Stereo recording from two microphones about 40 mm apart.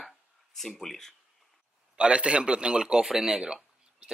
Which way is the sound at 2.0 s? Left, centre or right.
Right.